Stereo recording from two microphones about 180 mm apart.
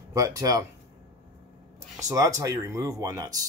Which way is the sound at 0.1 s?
20° right (ahead or behind).